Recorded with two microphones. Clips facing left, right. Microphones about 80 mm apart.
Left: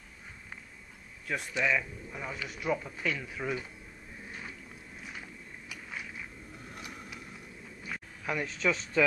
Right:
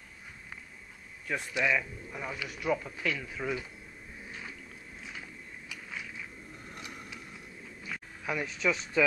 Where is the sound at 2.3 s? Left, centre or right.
Left.